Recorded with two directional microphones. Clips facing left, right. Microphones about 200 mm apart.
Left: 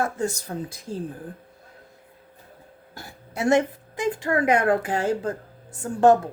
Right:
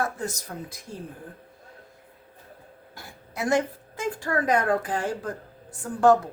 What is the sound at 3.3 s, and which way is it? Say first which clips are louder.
A woman's voice: left 4 dB; 25° left (ahead or behind).